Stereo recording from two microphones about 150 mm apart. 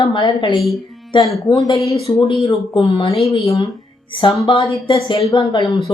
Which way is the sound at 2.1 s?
20° left (ahead or behind).